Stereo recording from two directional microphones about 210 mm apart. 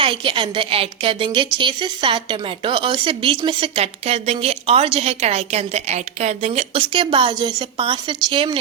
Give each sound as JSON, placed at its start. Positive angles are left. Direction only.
{"t": 0.0, "sound": "a woman's voice", "side_deg": -25}